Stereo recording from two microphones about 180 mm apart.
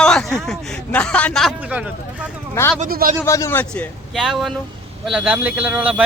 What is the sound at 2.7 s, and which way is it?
Speech, 50° right (ahead or behind).